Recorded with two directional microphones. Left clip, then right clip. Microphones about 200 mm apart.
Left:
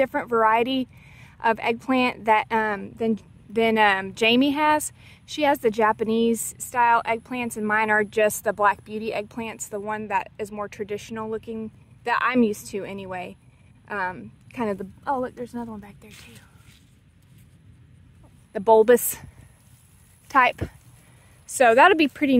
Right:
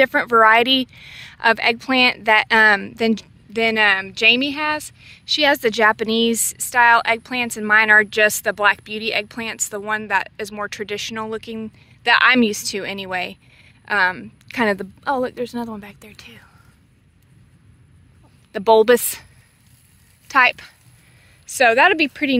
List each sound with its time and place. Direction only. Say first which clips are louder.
0.0 s a woman's voice: right 7 dB; centre (ahead or behind)
3.5 s a woman's voice: right 3 dB; 15° left (ahead or behind); by 16.4 s 30° right (ahead or behind)
18.5 s speech: right 3 dB; centre (ahead or behind)
20.2 s a woman's voice: right 4 dB; 15° left (ahead or behind)